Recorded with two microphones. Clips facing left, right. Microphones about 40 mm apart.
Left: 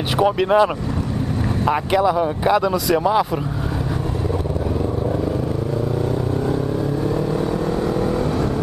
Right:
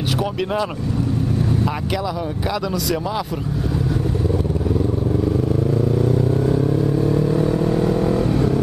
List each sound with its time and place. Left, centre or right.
0.2 s speech: centre
1.7 s speech: left
7.2 s vehicle: left
7.9 s vehicle: left